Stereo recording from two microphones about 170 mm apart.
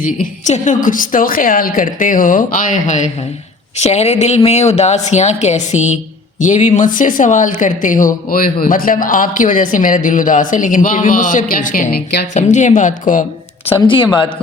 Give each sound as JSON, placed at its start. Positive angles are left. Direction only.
{"t": 0.0, "sound": "a woman's voice", "side_deg": 50}
{"t": 12.3, "sound": "speech", "side_deg": 45}
{"t": 13.8, "sound": "speech", "side_deg": 30}